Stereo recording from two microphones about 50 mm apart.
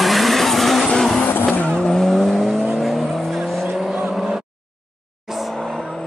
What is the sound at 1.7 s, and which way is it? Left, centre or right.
Vehicle, centre.